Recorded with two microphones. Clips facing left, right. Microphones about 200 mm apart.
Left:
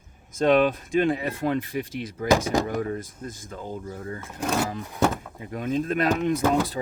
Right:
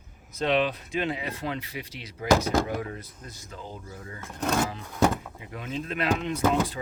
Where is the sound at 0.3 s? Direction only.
50° left (ahead or behind).